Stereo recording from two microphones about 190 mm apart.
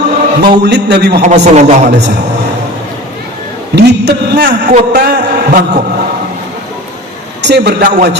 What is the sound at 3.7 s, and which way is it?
A man's voice, 65° right (ahead or behind).